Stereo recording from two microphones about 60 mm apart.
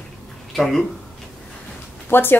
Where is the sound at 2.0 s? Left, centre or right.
Left.